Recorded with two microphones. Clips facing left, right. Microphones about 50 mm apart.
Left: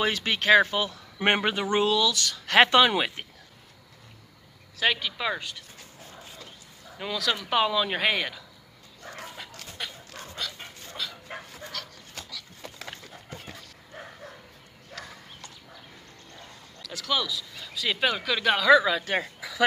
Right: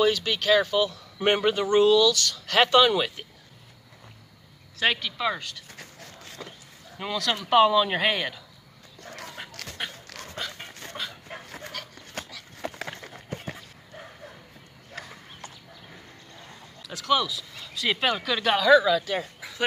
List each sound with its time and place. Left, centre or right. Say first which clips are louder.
0.0 s speech: right 3 dB; left
4.7 s speech: right 1 dB; centre
5.8 s a sound: right 2 dB; right
7.0 s speech: right 1 dB; centre
9.6 s dog: right 3 dB; right
10.7 s a sound: right 4 dB; right
11.4 s dog: right 2 dB; right
12.2 s a sound: right 6 dB; right
12.6 s run: right 9 dB; right
16.8 s speech: right 4 dB; centre
18.9 s speech: right 2 dB; left